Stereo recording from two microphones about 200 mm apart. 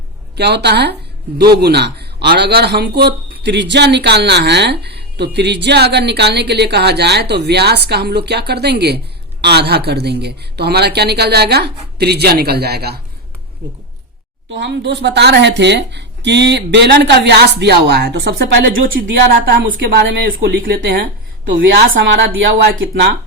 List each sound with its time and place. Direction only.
0.3 s a man's voice: 55° right (ahead or behind)
14.5 s a man's voice: 60° right (ahead or behind)
19.5 s speech: 45° right (ahead or behind)
20.1 s a man's voice: 65° right (ahead or behind)
21.6 s a man's voice: 70° right (ahead or behind); by 22.6 s 50° right (ahead or behind)